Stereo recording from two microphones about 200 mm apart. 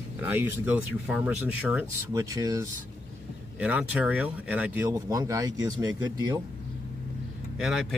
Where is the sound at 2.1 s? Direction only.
15° right (ahead or behind).